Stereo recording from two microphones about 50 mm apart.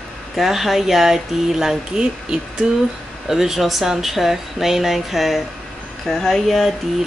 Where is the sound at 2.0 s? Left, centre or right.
Centre.